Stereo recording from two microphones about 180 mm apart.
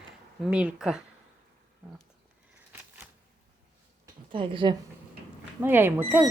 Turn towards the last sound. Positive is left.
turn(degrees=-10)  # may be behind; listen again after turning